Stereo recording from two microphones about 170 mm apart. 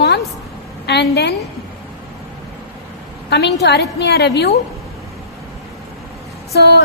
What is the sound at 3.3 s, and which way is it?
A woman's voice, 80° left.